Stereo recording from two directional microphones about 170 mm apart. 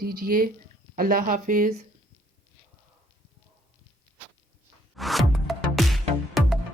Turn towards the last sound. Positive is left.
turn(degrees=0)  # may be behind; listen again after turning